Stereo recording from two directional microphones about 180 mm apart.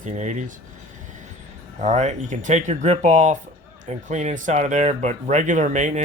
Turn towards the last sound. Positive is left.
turn(degrees=-40)  # may be behind; listen again after turning